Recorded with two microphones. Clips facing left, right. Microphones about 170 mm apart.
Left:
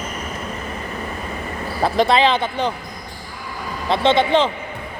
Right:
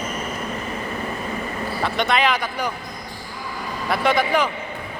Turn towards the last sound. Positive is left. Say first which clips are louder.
# left 4 dB
turn(degrees=25)  # may be behind; listen again after turning